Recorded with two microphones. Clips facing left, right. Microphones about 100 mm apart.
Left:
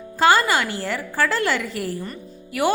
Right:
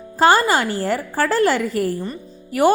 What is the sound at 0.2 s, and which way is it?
A woman's voice, 40° right (ahead or behind).